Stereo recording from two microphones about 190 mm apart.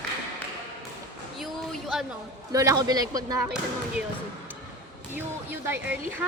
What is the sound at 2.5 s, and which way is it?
Speech, 20° right (ahead or behind).